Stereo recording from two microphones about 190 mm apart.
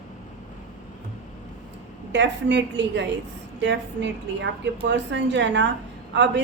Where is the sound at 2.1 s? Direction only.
65° right (ahead or behind).